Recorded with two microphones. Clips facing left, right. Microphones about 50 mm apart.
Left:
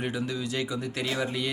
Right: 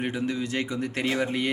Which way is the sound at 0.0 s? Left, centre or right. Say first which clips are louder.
Right 2 dB; right.